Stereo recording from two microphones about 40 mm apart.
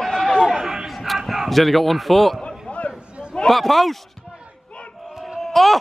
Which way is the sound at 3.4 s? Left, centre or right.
Centre.